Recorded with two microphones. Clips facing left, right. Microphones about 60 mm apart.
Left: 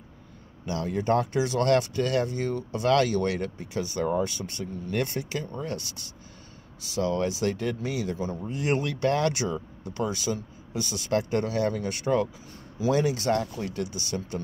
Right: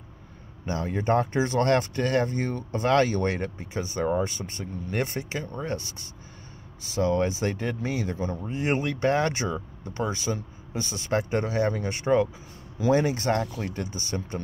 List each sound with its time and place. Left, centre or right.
0.7 s speech: right